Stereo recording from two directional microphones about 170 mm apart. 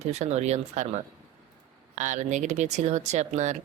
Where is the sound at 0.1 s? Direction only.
40° right (ahead or behind).